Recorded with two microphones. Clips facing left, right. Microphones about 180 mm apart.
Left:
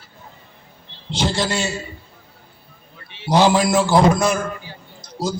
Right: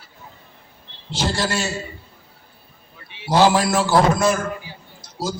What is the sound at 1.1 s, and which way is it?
Speech, 20° left (ahead or behind).